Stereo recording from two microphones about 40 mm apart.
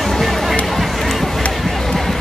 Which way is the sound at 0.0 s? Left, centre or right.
Centre.